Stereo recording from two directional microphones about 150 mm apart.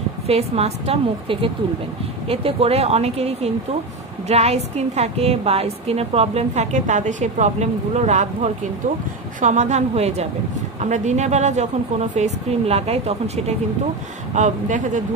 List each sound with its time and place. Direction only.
0.3 s a woman's voice: 45° right (ahead or behind)
14.3 s speech: 55° right (ahead or behind)